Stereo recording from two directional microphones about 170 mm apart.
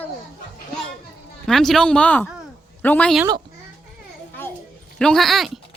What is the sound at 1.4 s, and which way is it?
A woman's voice, centre (ahead or behind).